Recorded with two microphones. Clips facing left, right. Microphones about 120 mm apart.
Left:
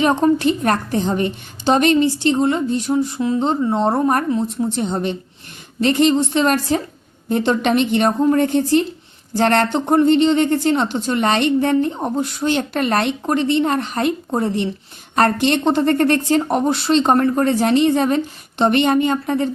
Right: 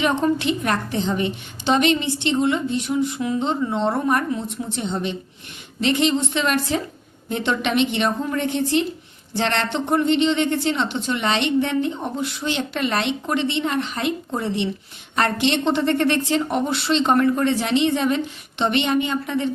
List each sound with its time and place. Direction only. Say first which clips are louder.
0.0 s a woman's voice: left 5 dB; 40° left (ahead or behind)